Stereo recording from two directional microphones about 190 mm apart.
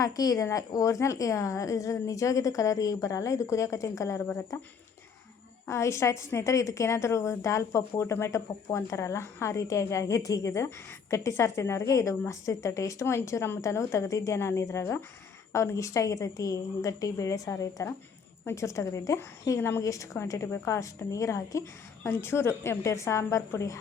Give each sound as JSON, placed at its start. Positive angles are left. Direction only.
{"t": 0.0, "sound": "a woman's voice", "side_deg": 20}
{"t": 4.3, "sound": "speech", "side_deg": 5}
{"t": 5.6, "sound": "a woman's voice", "side_deg": 15}